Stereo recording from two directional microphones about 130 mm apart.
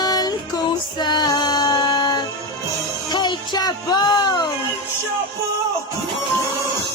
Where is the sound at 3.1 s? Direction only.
35° left (ahead or behind).